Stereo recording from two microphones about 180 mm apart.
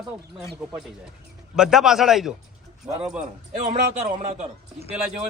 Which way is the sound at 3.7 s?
40° right (ahead or behind).